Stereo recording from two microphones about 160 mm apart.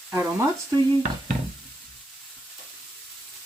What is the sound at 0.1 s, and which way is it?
Frying, 15° right (ahead or behind).